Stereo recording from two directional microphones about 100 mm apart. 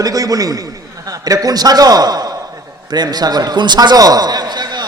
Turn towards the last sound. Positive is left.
turn(degrees=-40)  # may be behind; listen again after turning